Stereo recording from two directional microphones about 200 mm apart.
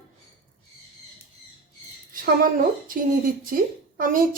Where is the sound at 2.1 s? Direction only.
45° right (ahead or behind).